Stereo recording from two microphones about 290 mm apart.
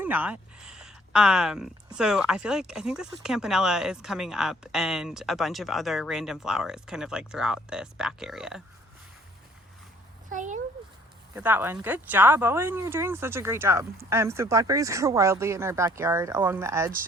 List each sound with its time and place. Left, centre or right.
0.0 s speech: centre
10.2 s a child's voice: right
11.3 s speech: centre